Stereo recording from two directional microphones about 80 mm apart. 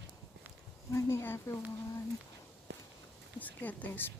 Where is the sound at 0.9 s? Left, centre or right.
Left.